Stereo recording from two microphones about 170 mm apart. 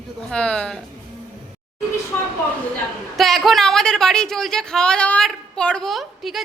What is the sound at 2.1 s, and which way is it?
A woman's voice, 10° left (ahead or behind).